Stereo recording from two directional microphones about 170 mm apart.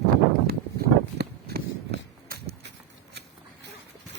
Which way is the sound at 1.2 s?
80° right.